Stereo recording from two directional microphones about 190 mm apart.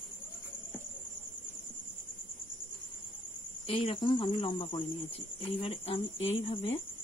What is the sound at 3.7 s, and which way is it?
Speech, 30° left (ahead or behind).